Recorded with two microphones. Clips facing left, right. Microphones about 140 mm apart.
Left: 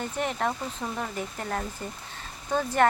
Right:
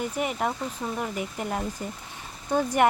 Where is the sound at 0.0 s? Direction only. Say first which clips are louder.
Right 1 dB; 10° right (ahead or behind).